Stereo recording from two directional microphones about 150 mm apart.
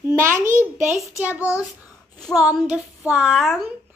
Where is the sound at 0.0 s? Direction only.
15° right (ahead or behind).